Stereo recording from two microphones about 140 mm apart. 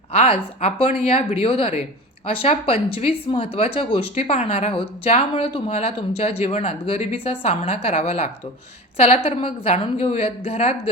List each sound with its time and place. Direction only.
0.1 s speech: 45° left (ahead or behind)